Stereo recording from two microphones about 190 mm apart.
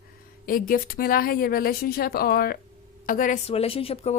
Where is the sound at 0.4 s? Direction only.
50° left (ahead or behind).